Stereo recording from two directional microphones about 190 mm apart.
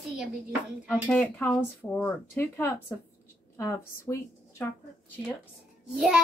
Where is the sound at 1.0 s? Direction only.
10° left (ahead or behind).